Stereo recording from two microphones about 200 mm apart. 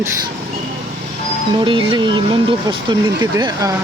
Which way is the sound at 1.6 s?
25° right (ahead or behind).